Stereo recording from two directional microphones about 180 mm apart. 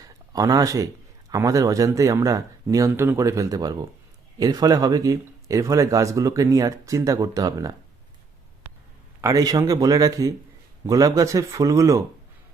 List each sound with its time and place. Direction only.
0.0 s a sound: 20° right (ahead or behind)
1.3 s speech: 20° right (ahead or behind)
9.2 s speech: 20° right (ahead or behind)